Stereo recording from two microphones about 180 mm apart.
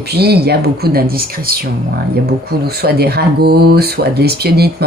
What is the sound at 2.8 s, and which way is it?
A woman's voice, 60° right (ahead or behind).